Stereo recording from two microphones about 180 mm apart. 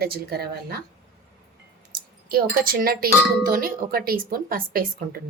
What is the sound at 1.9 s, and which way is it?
A woman's voice, 55° right (ahead or behind).